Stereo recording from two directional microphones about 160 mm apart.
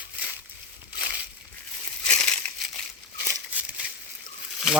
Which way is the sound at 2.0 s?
5° left (ahead or behind).